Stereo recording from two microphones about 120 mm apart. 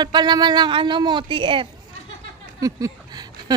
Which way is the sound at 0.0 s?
35° right (ahead or behind).